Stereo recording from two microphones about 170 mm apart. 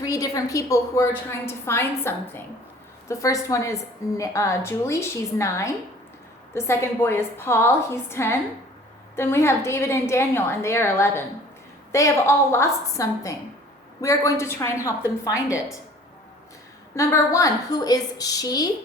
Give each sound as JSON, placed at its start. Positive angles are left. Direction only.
{"t": 0.0, "sound": "a woman's voice", "side_deg": 20}
{"t": 16.9, "sound": "a woman's voice", "side_deg": 15}